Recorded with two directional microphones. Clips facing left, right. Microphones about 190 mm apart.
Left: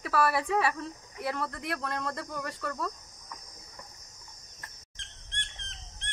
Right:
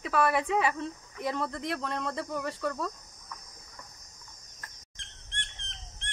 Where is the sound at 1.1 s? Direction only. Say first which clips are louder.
Right 1 dB; 5° left (ahead or behind).